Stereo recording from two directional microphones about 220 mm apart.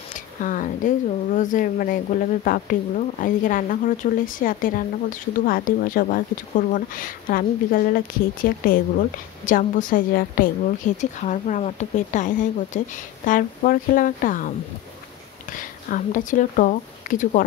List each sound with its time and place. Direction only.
0.4 s speech: 35° left (ahead or behind)
15.5 s speech: 35° left (ahead or behind)